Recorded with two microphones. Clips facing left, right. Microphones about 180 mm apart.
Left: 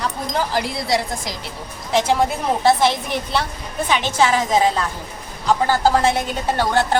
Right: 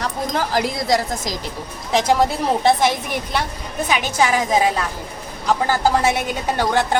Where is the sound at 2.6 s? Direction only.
15° right (ahead or behind).